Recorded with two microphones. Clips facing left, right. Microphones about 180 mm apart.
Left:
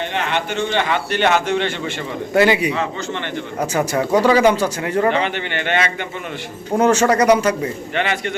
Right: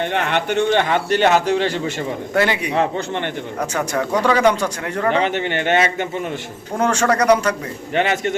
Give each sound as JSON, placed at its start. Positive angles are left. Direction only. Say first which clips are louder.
{"t": 0.1, "sound": "a man's voice", "louder": "right 2 dB", "side_deg": -55}
{"t": 2.3, "sound": "speech", "louder": "left 4 dB", "side_deg": 10}
{"t": 5.1, "sound": "speech", "louder": "right 2 dB", "side_deg": -40}
{"t": 6.7, "sound": "speech", "louder": "left 3 dB", "side_deg": 5}
{"t": 7.9, "sound": "a man's voice", "louder": "right 4 dB", "side_deg": -40}